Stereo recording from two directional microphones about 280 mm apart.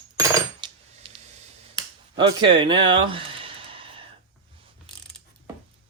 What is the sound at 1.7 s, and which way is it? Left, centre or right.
Finger snapping, centre.